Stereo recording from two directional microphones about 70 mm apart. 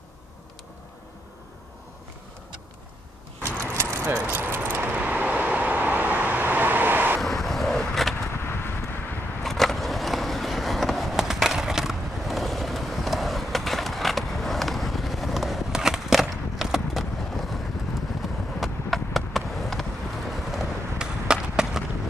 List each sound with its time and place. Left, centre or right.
3.7 s keys jangling: right
4.0 s speech: right
4.6 s vehicle: right
7.2 s vehicle: centre
8.3 s vehicle: left
9.4 s skateboard: centre
18.2 s clip-clop: centre
18.6 s a sound: centre